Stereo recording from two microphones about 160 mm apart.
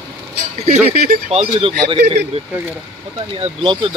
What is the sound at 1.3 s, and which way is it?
Speech, 40° right (ahead or behind).